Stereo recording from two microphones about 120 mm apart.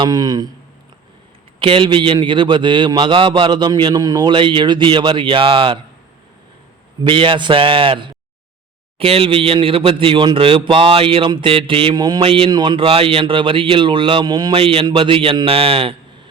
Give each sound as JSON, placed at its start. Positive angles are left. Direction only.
{"t": 0.0, "sound": "speech", "side_deg": -30}
{"t": 1.5, "sound": "a man's voice", "side_deg": -45}
{"t": 7.0, "sound": "a man's voice", "side_deg": -45}
{"t": 12.2, "sound": "a man's voice", "side_deg": -50}
{"t": 12.5, "sound": "a man's voice", "side_deg": -40}
{"t": 14.6, "sound": "a man's voice", "side_deg": -50}